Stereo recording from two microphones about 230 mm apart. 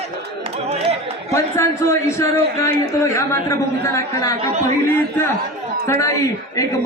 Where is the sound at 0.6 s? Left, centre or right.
Right.